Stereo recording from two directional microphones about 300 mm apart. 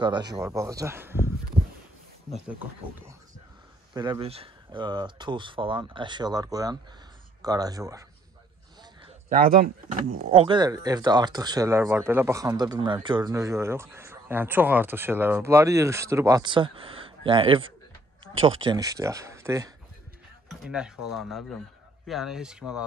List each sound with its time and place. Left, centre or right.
0.0 s speech: centre
3.9 s speech: centre
9.0 s a sound: right
10.3 s speech: centre